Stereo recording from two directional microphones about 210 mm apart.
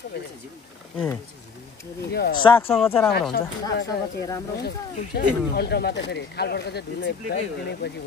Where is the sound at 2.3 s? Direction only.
20° left (ahead or behind).